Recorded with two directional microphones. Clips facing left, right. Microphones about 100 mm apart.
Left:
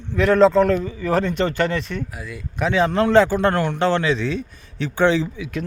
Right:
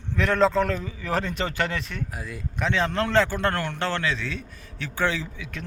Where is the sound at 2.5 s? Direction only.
10° left (ahead or behind).